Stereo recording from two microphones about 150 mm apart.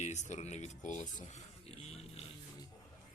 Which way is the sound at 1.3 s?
45° left (ahead or behind).